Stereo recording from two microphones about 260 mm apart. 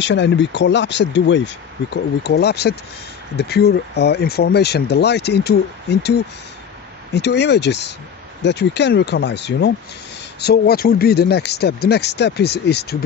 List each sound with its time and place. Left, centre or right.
0.0 s speech: left